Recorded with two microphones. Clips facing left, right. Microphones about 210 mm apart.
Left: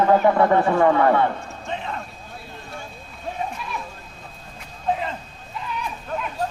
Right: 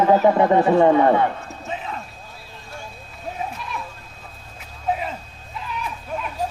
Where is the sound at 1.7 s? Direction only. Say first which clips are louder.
Left 1 dB; 5° right (ahead or behind).